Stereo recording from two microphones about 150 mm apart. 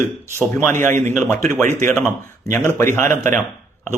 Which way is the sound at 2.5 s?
15° left (ahead or behind).